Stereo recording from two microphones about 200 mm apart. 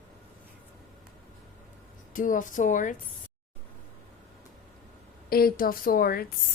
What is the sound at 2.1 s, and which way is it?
Speech, 40° left (ahead or behind).